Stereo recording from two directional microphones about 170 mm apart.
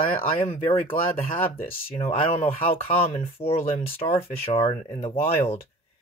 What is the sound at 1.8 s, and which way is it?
Speech, 35° left (ahead or behind).